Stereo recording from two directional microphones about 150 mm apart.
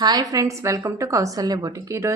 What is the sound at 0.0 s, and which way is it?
A woman's voice, 25° right (ahead or behind).